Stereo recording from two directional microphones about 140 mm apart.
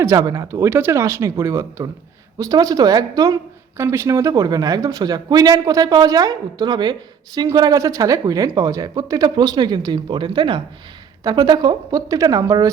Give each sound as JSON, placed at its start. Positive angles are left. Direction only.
{"t": 0.0, "sound": "speech", "side_deg": -25}